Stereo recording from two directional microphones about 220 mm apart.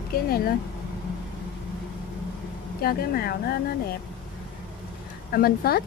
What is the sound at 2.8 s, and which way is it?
Speech, 45° left (ahead or behind).